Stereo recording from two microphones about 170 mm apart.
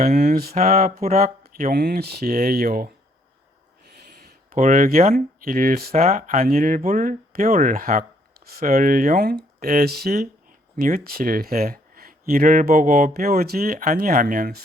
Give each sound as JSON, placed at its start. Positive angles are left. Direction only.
{"t": 0.0, "sound": "mantra", "side_deg": -45}
{"t": 0.5, "sound": "speech", "side_deg": -40}
{"t": 1.7, "sound": "speech", "side_deg": -70}
{"t": 4.5, "sound": "speech", "side_deg": -50}
{"t": 5.9, "sound": "speech", "side_deg": -40}
{"t": 6.4, "sound": "speech", "side_deg": -55}